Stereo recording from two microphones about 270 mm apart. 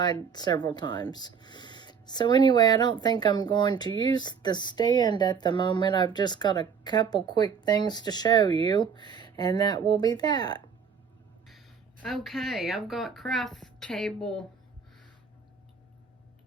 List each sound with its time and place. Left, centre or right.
0.0 s speech: centre
12.0 s speech: centre